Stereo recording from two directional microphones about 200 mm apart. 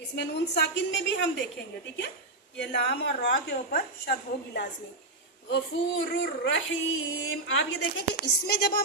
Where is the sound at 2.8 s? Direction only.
55° left (ahead or behind).